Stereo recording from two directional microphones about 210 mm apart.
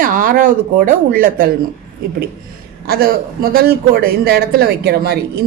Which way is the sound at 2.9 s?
45° right (ahead or behind).